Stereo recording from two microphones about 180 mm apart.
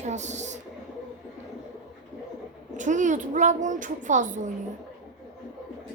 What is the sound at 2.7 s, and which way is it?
A child's voice, 45° right (ahead or behind).